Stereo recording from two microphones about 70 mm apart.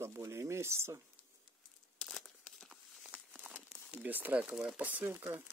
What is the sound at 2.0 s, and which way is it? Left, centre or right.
Crumpling, centre.